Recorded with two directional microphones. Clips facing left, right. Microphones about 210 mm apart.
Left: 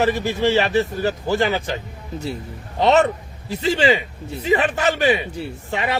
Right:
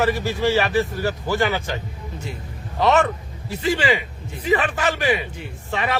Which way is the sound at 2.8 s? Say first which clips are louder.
Left 2 dB; 25° left (ahead or behind).